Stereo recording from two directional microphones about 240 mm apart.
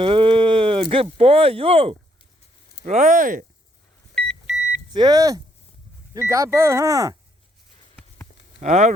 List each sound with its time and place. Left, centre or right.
0.0 s speech: right
4.1 s beep: centre
4.9 s speech: centre
8.6 s speech: right